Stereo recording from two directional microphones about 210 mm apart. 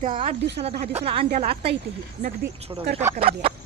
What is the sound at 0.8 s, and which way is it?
Speech, 30° right (ahead or behind).